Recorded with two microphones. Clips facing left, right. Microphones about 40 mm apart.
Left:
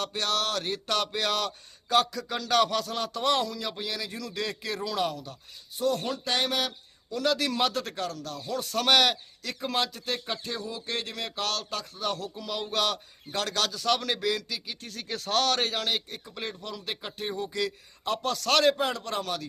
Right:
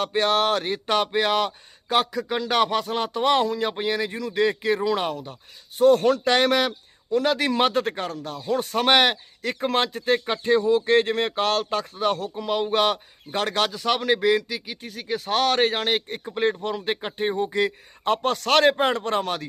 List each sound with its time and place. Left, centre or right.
0.0 s speech: right